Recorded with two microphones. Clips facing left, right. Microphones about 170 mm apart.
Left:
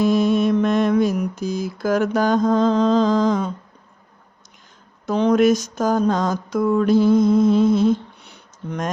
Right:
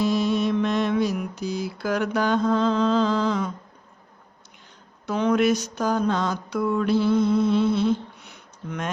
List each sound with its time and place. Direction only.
0.0 s mantra: 50° left (ahead or behind)
5.0 s mantra: 35° left (ahead or behind)